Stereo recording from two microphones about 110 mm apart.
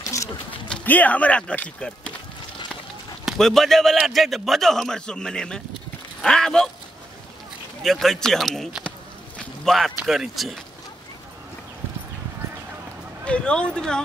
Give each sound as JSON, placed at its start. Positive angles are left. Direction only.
{"t": 0.0, "sound": "a sound", "side_deg": 30}
{"t": 0.7, "sound": "speech", "side_deg": 10}
{"t": 3.3, "sound": "a man's voice", "side_deg": 5}
{"t": 7.8, "sound": "a man's voice", "side_deg": 0}
{"t": 9.4, "sound": "a sound", "side_deg": 0}
{"t": 10.0, "sound": "a man's voice", "side_deg": 0}
{"t": 13.2, "sound": "speech", "side_deg": 10}